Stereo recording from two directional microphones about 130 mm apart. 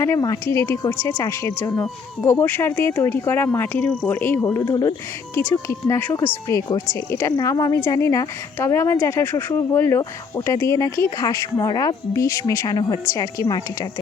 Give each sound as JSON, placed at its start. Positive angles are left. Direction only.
{"t": 0.2, "sound": "speech", "side_deg": 25}
{"t": 4.4, "sound": "speech", "side_deg": 25}
{"t": 5.3, "sound": "speech", "side_deg": 20}